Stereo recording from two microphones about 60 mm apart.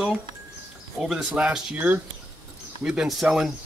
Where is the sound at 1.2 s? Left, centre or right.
Centre.